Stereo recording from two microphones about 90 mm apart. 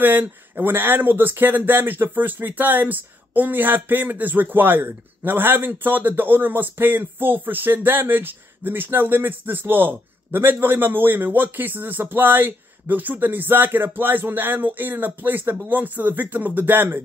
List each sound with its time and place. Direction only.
0.0 s speech: 20° right (ahead or behind)